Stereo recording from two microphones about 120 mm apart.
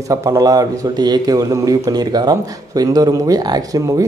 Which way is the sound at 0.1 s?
25° right (ahead or behind).